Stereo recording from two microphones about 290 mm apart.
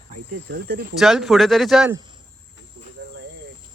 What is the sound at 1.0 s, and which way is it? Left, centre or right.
Speech, centre.